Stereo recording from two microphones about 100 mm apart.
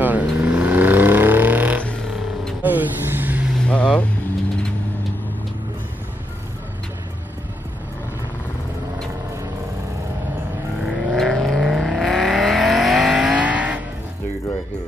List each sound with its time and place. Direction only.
0.0 s vehicle: 15° right (ahead or behind)
3.6 s vehicle: 10° left (ahead or behind)
10.8 s vehicle: 10° right (ahead or behind)
11.1 s vehicle: 5° left (ahead or behind); by 13.7 s 15° right (ahead or behind)